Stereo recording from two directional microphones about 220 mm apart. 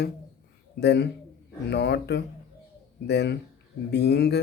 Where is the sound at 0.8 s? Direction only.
50° left (ahead or behind).